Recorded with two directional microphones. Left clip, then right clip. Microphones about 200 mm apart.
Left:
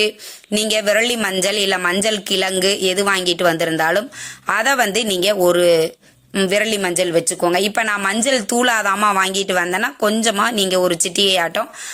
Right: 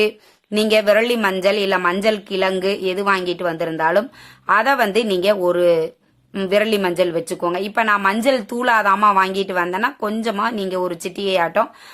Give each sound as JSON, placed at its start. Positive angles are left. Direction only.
{"t": 0.5, "sound": "speech", "side_deg": 15}